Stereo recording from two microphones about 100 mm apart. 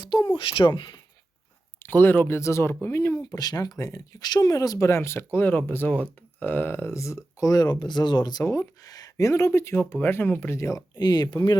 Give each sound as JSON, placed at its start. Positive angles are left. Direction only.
{"t": 0.0, "sound": "speech", "side_deg": 45}
{"t": 1.8, "sound": "speech", "side_deg": 20}
{"t": 10.9, "sound": "speech", "side_deg": 45}